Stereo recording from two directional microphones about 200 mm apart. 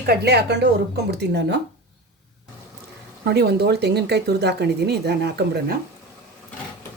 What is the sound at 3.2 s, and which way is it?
Speech, 55° right (ahead or behind).